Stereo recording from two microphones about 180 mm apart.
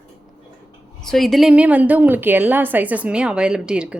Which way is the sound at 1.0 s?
Centre (ahead or behind).